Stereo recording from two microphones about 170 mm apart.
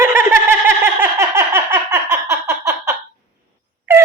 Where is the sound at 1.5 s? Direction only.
15° right (ahead or behind).